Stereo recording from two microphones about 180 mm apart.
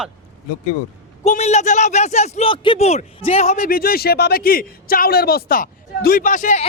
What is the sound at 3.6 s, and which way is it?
Speech, 55° left (ahead or behind).